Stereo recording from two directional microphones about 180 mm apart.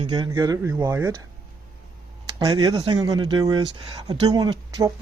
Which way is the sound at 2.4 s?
20° right (ahead or behind).